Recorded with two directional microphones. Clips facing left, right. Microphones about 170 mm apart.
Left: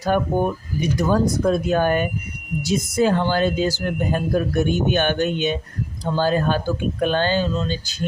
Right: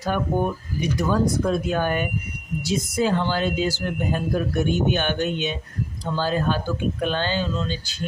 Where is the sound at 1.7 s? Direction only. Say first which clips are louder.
Left 4 dB; 45° left (ahead or behind).